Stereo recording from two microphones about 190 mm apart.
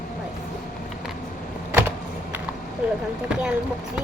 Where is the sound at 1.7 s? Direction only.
15° right (ahead or behind).